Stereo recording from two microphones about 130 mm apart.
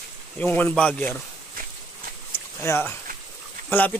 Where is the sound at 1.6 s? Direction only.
90° right.